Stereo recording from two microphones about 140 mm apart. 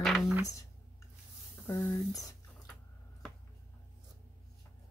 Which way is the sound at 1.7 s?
20° left (ahead or behind).